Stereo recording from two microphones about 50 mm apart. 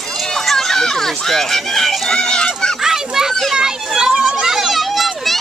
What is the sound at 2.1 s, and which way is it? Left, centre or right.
Speech, centre.